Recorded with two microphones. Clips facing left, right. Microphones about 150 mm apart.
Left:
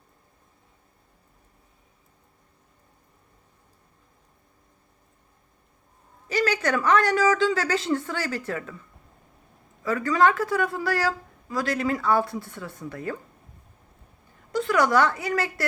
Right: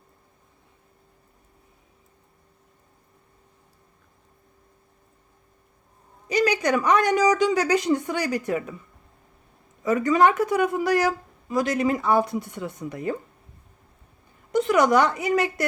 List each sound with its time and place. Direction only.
6.2 s speech: 15° right (ahead or behind)
9.8 s a woman's voice: 20° right (ahead or behind)
14.5 s a woman's voice: 20° right (ahead or behind)